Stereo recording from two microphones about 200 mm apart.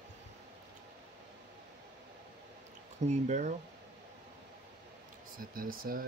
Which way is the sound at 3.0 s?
35° right (ahead or behind).